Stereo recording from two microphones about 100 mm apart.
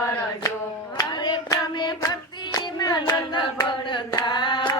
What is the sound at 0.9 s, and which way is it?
Hands, 40° left (ahead or behind).